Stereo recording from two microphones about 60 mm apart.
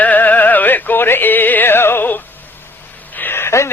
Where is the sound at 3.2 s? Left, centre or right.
Left.